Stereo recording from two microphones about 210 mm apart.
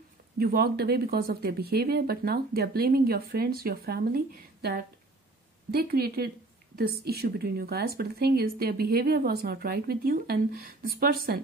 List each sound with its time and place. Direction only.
0.4 s speech: 45° right (ahead or behind)